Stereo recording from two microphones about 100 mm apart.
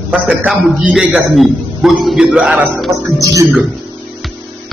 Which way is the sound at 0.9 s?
Centre (ahead or behind).